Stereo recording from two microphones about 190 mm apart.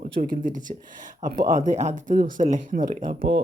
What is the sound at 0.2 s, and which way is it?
Speech, 45° right (ahead or behind).